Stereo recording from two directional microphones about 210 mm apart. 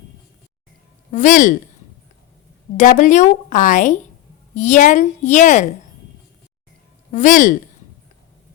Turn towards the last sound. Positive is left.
turn(degrees=40)  # may be behind; listen again after turning